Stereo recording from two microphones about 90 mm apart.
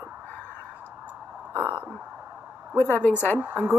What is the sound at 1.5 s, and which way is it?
Speech, 25° right (ahead or behind).